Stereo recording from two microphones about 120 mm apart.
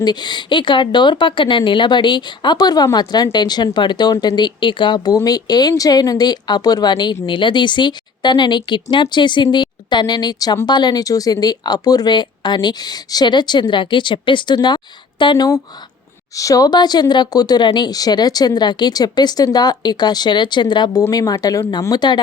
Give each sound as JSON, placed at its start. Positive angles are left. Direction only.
{"t": 0.0, "sound": "speech", "side_deg": 35}
{"t": 16.3, "sound": "speech", "side_deg": 30}